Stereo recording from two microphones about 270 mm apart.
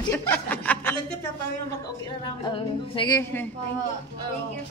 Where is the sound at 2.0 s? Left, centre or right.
Centre.